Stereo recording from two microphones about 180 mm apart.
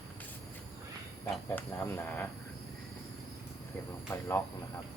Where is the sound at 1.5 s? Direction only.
10° left (ahead or behind).